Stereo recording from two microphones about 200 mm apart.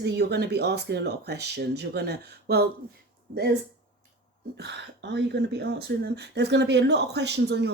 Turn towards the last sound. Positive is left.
turn(degrees=-55)  # may be behind; listen again after turning